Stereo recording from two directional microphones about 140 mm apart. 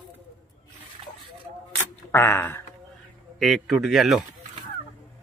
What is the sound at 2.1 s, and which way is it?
Speech, 15° left (ahead or behind).